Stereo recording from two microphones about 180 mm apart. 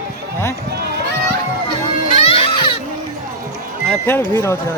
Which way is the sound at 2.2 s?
30° left (ahead or behind).